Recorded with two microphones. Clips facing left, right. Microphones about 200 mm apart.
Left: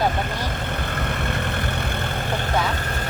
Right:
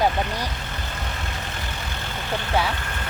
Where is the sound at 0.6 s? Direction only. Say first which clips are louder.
Left 6 dB; 60° left (ahead or behind).